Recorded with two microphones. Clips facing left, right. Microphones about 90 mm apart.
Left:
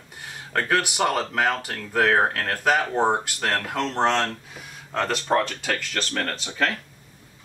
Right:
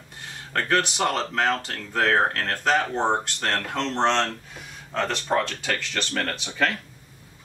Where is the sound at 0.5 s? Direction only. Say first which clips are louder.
Even; 5° left (ahead or behind).